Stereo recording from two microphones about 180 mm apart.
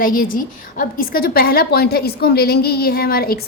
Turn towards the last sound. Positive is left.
turn(degrees=55)  # may be behind; listen again after turning